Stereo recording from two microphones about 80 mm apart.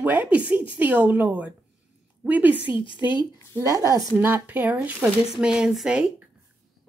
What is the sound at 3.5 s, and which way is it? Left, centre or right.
Speech, right.